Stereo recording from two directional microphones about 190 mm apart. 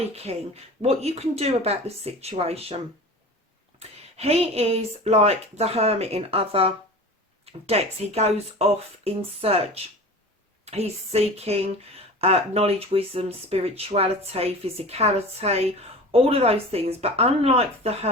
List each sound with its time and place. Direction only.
0.0 s speech: 35° right (ahead or behind)